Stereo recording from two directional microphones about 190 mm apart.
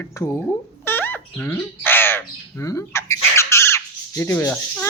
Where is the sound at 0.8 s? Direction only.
10° left (ahead or behind).